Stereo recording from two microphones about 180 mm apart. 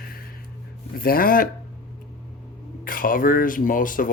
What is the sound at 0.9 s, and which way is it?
Speech, 55° left (ahead or behind).